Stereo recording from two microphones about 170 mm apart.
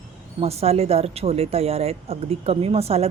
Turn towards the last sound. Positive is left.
turn(degrees=-35)  # may be behind; listen again after turning